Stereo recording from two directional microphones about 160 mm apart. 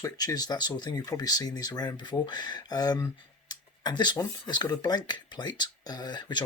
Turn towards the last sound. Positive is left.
turn(degrees=25)  # may be behind; listen again after turning